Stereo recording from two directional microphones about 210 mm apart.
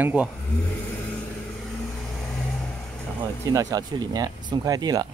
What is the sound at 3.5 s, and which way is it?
Speech, 15° right (ahead or behind).